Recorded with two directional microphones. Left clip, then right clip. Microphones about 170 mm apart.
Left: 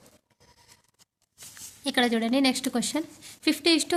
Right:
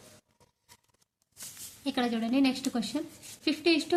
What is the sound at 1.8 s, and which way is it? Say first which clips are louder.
A woman's voice: left 6 dB; 50° left (ahead or behind).